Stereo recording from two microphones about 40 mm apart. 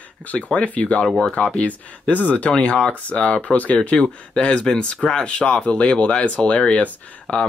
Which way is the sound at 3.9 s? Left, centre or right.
Left.